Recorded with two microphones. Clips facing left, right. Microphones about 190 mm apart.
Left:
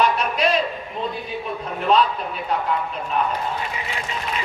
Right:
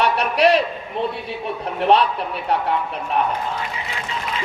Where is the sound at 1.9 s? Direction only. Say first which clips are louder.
Right 2 dB; 70° right (ahead or behind).